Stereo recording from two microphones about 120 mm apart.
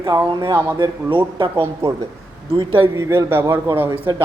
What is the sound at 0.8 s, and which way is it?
Speech, 40° right (ahead or behind).